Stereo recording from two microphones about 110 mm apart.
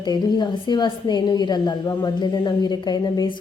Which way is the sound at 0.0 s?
40° left (ahead or behind).